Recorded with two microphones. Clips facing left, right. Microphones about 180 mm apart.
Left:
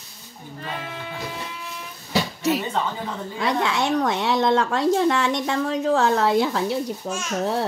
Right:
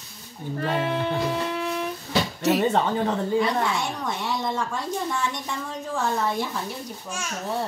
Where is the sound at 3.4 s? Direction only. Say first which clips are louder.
Left 2 dB; 90° left.